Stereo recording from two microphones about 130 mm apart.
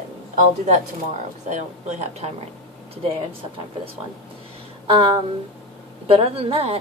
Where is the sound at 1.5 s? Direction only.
65° right (ahead or behind).